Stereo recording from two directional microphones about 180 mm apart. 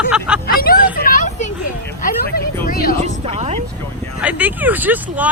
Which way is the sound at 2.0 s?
55° left (ahead or behind).